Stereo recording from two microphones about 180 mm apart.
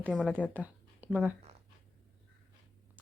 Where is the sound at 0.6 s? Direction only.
10° right (ahead or behind).